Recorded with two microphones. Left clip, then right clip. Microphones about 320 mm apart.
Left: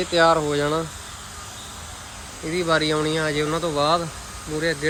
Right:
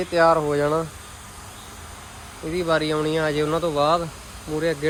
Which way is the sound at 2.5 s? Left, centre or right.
Centre.